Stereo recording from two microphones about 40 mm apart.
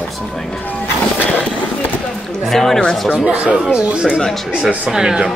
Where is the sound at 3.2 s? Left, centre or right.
Centre.